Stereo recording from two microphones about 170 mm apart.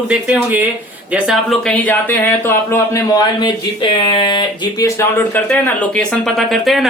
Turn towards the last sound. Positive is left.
turn(degrees=0)  # may be behind; listen again after turning